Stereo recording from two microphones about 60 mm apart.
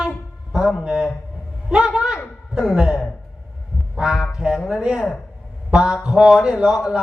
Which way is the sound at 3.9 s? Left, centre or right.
Centre.